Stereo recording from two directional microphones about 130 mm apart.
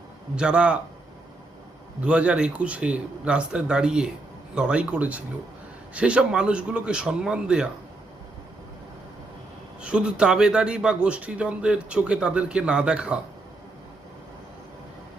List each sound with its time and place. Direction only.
0.3 s a man's voice: 10° right (ahead or behind)
2.0 s a man's voice: 10° right (ahead or behind)
9.8 s a man's voice: 5° right (ahead or behind)